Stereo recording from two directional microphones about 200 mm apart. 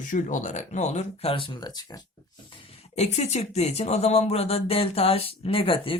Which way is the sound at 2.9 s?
35° left (ahead or behind).